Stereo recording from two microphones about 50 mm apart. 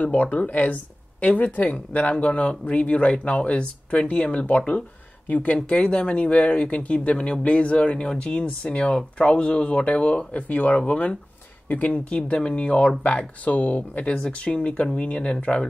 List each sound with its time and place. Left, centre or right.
0.0 s speech: left